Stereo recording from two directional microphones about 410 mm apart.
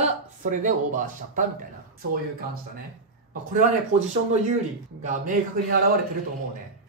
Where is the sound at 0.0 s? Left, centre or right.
Centre.